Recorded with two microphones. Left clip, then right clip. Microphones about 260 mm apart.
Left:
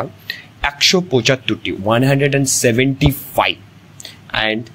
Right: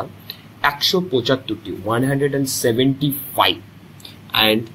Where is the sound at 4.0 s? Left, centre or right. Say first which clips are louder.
Right 2 dB; left.